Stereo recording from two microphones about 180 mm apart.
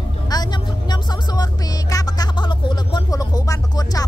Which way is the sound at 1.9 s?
20° left (ahead or behind).